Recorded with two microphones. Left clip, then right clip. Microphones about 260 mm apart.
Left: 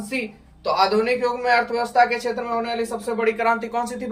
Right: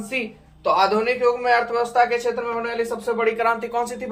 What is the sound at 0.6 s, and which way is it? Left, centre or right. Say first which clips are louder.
Speech: right 1 dB; centre.